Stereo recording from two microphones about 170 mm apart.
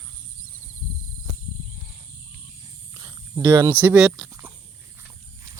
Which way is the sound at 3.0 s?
25° right (ahead or behind).